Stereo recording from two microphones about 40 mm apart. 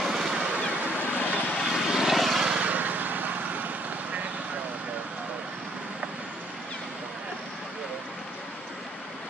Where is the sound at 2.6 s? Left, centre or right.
Right.